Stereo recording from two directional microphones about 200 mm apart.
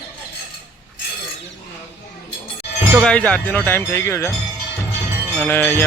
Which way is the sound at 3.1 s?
5° left (ahead or behind).